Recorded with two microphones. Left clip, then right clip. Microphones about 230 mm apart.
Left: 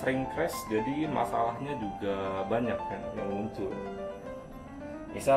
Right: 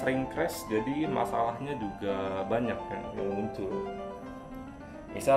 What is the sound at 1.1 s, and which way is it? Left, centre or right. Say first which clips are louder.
Speech: even; right.